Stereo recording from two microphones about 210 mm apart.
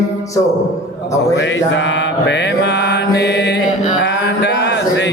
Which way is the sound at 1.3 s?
60° left (ahead or behind).